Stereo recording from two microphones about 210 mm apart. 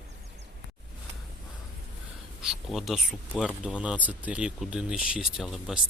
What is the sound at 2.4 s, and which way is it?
Speech, centre (ahead or behind).